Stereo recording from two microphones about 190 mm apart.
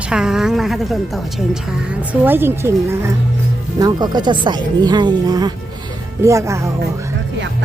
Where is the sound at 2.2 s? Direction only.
10° right (ahead or behind).